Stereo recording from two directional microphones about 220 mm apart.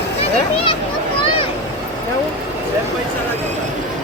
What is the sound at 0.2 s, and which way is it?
Children playing, 25° left (ahead or behind).